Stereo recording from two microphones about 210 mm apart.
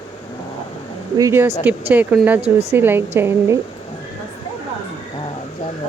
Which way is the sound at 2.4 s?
30° right (ahead or behind).